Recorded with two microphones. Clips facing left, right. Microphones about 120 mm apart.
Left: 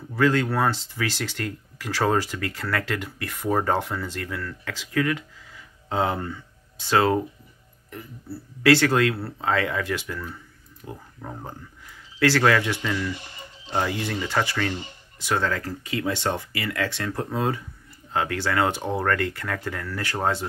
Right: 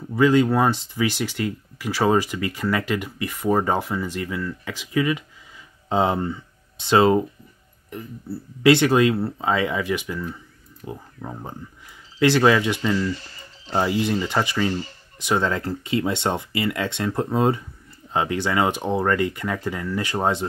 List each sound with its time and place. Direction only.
0.1 s speech: 15° right (ahead or behind)
12.9 s speech: 15° left (ahead or behind)
13.7 s speech: 15° right (ahead or behind)